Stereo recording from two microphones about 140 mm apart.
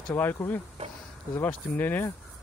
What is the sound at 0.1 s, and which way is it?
Speech, 15° left (ahead or behind).